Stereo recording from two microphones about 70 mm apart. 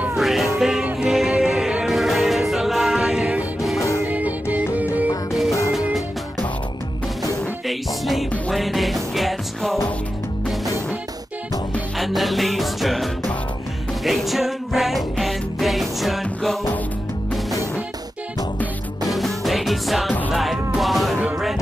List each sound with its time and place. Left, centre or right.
0.1 s music: centre; by 5.1 s right
7.6 s music: centre
12.0 s music: centre
19.0 s music: centre